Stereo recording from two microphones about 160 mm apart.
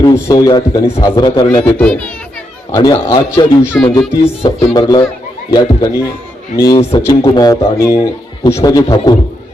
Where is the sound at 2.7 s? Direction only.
20° left (ahead or behind).